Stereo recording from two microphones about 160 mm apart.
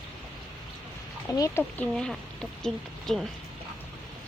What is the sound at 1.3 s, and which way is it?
Speech, 20° left (ahead or behind).